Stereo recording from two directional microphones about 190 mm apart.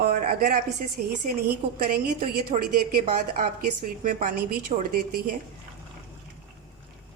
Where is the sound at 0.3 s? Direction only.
45° right (ahead or behind).